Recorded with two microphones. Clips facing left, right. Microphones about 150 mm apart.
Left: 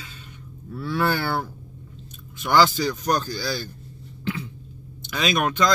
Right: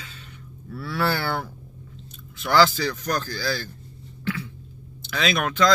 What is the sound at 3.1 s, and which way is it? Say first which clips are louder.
Speech: left 2 dB; 20° left (ahead or behind).